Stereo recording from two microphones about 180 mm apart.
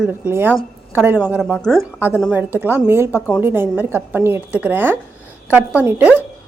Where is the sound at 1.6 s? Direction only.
5° left (ahead or behind).